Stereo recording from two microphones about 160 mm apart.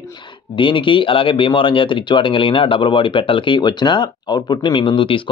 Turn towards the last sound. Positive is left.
turn(degrees=35)  # may be behind; listen again after turning